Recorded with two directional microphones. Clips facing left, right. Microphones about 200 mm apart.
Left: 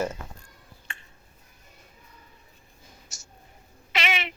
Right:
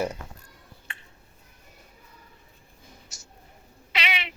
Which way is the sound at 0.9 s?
45° left (ahead or behind).